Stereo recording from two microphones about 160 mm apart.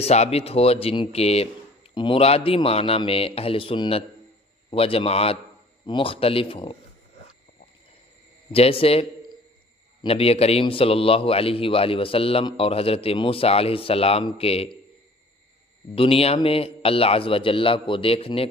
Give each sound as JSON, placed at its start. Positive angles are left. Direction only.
{"t": 0.0, "sound": "a man's voice", "side_deg": 40}
{"t": 8.5, "sound": "a man's voice", "side_deg": 35}
{"t": 10.0, "sound": "a man's voice", "side_deg": 40}
{"t": 15.9, "sound": "a man's voice", "side_deg": 35}